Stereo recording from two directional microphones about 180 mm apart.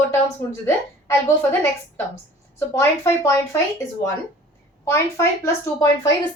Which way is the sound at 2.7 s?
15° left (ahead or behind).